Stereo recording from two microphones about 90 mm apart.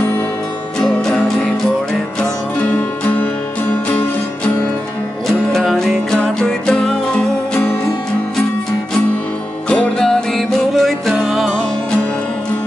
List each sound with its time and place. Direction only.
0.7 s music: 5° left (ahead or behind)
5.5 s music: centre (ahead or behind)
9.7 s music: 5° left (ahead or behind)